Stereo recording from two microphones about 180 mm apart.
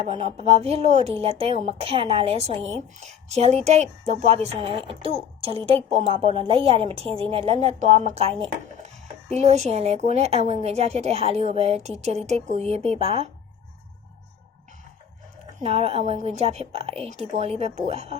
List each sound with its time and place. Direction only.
0.0 s a woman's voice: 35° right (ahead or behind)
15.6 s a woman's voice: 35° right (ahead or behind)